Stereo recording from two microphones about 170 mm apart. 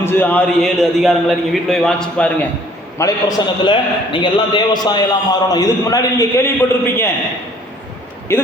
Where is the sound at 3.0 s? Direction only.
20° left (ahead or behind).